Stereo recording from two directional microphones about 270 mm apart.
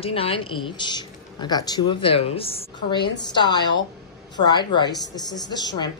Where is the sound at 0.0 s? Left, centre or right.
Left.